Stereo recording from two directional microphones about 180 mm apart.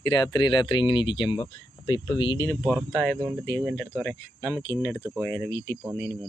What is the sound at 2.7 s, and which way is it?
Speech, 5° right (ahead or behind).